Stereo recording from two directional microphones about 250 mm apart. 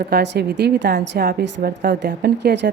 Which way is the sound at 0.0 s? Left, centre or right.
Right.